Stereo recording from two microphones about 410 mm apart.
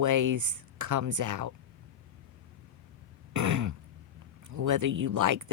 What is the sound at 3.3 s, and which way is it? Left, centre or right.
Throat clearing, right.